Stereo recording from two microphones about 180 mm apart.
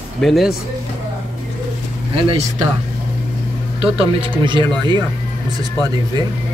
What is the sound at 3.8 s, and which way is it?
Speech, 30° right (ahead or behind).